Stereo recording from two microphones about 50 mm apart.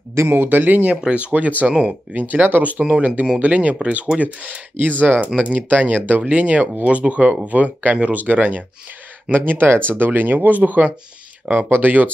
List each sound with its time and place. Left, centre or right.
0.3 s speech: right
1.7 s speech: centre
2.1 s speech: right